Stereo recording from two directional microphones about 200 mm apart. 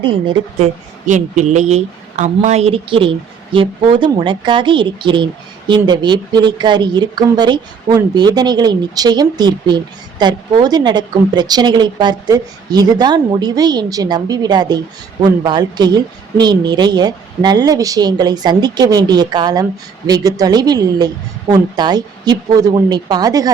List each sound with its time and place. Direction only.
0.0 s a woman's voice: 25° right (ahead or behind)
0.6 s a woman's voice: 35° right (ahead or behind); by 23.5 s 20° right (ahead or behind)